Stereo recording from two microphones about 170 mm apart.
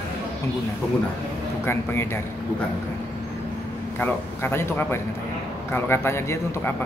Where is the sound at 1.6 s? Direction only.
15° left (ahead or behind).